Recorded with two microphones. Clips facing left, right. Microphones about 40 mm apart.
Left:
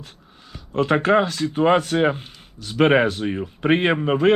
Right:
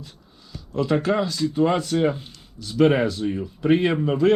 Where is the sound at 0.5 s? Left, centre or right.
Left.